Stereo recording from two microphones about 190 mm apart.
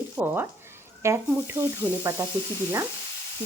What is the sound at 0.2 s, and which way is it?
Speech, 10° right (ahead or behind).